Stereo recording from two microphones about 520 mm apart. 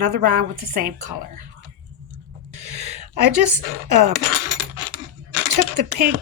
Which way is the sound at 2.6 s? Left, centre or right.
Right.